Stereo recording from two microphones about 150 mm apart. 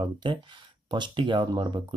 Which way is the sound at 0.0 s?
30° right (ahead or behind).